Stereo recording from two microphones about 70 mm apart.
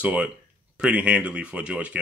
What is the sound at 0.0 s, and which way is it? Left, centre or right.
Speech, centre.